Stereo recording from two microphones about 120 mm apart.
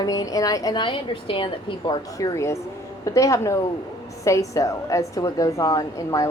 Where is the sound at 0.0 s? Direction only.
30° left (ahead or behind).